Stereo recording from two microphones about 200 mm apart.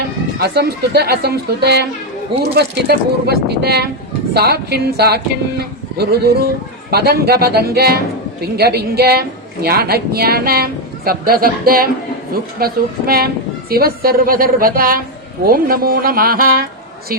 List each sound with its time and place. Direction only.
0.3 s speech: 50° right (ahead or behind)